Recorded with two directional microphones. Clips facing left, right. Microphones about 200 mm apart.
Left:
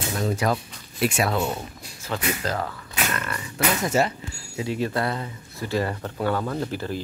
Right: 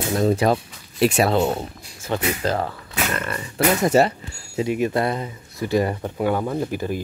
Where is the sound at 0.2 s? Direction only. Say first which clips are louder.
Right 5 dB; 30° right (ahead or behind).